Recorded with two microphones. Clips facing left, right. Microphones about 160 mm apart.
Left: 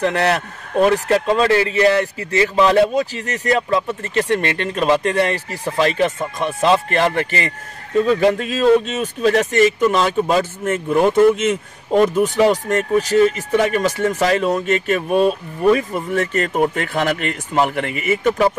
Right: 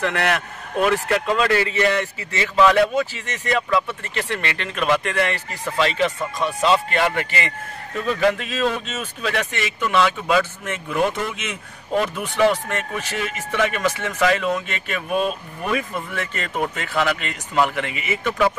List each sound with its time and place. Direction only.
0.0 s speech: 35° left (ahead or behind)
5.8 s speech: 45° left (ahead or behind); by 8.4 s 30° left (ahead or behind)
8.4 s speech: 40° left (ahead or behind)